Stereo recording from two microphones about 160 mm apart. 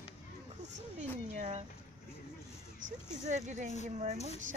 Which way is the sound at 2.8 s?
50° right (ahead or behind).